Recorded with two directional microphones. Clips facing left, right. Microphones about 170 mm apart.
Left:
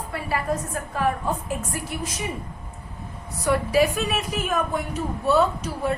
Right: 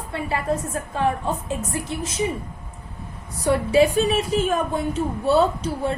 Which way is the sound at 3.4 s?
30° right (ahead or behind).